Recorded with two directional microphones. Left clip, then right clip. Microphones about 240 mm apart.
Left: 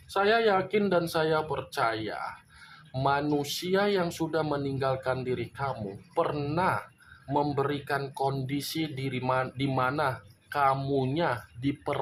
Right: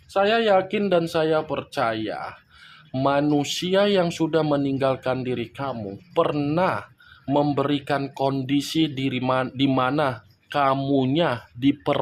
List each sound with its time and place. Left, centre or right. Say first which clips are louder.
0.1 s speech: right 5 dB; right